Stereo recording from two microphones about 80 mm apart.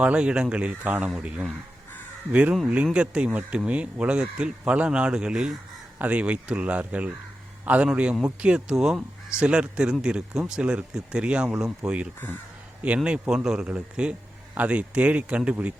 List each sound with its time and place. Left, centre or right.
0.0 s a man's voice: centre